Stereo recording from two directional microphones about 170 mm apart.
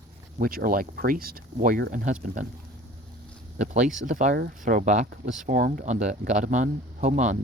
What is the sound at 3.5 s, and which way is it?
Speech, 45° right (ahead or behind).